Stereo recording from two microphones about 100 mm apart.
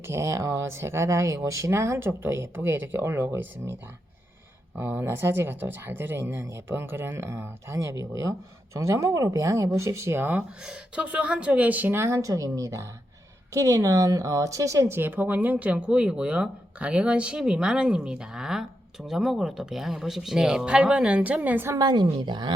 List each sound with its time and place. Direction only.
0.1 s speech: 30° right (ahead or behind)
4.8 s speech: 20° right (ahead or behind)
10.6 s speech: 10° right (ahead or behind)
21.8 s speech: 45° right (ahead or behind)